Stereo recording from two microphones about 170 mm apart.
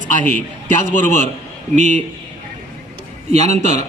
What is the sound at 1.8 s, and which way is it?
Speech, 45° right (ahead or behind).